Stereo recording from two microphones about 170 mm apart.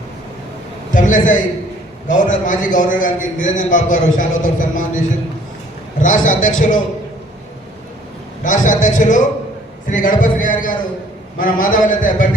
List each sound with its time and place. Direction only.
0.9 s a man's voice: 50° left (ahead or behind)
6.0 s a man's voice: 50° left (ahead or behind)
8.4 s a man's voice: 50° left (ahead or behind)